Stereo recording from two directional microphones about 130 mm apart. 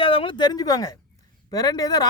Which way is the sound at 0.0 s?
45° left (ahead or behind).